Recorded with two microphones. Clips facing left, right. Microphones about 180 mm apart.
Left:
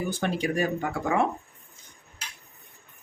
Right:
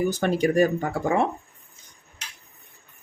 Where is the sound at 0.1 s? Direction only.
45° right (ahead or behind).